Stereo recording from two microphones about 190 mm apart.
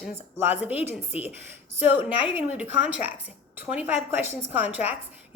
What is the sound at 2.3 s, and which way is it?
Speech, 10° right (ahead or behind).